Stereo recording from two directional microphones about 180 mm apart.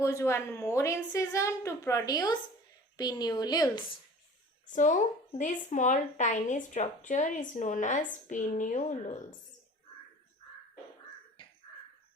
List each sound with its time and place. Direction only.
0.0 s a woman's voice: 15° left (ahead or behind)
4.7 s a woman's voice: 45° left (ahead or behind)
11.4 s crow: 30° left (ahead or behind)